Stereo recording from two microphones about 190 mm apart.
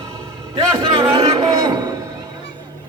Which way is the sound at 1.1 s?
20° right (ahead or behind).